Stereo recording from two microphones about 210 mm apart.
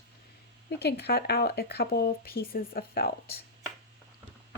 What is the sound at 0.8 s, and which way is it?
Speech, 50° left (ahead or behind).